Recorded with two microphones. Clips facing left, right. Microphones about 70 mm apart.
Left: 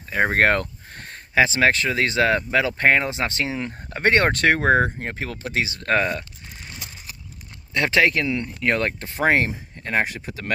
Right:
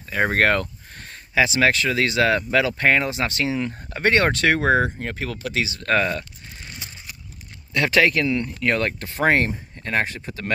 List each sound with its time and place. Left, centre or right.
0.1 s speech: left
0.6 s speech: left
7.7 s speech: left
9.2 s speech: centre